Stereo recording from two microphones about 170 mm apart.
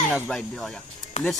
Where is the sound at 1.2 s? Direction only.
40° left (ahead or behind).